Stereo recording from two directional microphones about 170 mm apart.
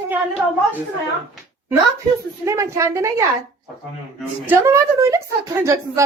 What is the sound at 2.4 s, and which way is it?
Speech, 15° right (ahead or behind).